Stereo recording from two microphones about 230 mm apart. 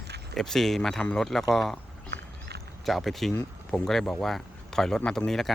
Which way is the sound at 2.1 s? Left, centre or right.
Right.